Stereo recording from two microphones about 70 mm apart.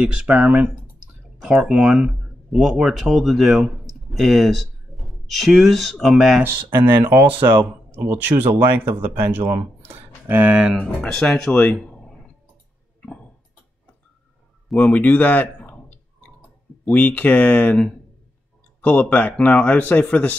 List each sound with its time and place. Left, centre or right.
0.4 s speech: centre
7.1 s a man's voice: right
10.5 s speech: centre
10.8 s speech: centre
11.5 s a sound: centre
14.8 s a sound: left
16.8 s speech: left
18.8 s speech: left